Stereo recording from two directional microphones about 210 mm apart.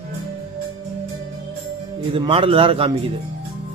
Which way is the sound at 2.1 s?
25° right (ahead or behind).